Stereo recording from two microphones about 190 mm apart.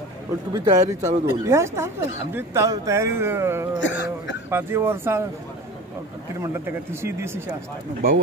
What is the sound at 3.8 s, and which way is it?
Speech, 70° left (ahead or behind).